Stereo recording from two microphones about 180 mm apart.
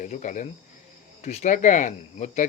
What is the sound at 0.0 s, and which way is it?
Speech, 45° left (ahead or behind).